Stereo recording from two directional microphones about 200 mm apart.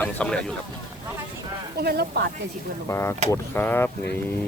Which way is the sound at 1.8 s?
50° right (ahead or behind).